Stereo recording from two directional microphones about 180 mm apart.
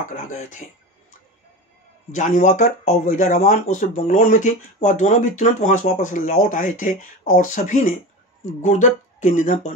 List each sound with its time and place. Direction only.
0.0 s speech: 45° left (ahead or behind)
2.1 s speech: 45° left (ahead or behind)